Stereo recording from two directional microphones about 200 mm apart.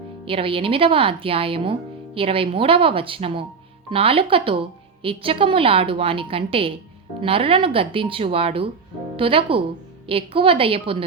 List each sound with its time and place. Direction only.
0.3 s speech: 25° right (ahead or behind)